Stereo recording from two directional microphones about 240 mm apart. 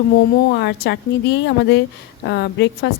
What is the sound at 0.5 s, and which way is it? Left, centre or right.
Speech, left.